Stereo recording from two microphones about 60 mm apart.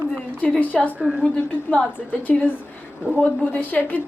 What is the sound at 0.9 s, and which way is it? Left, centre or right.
Speech, centre.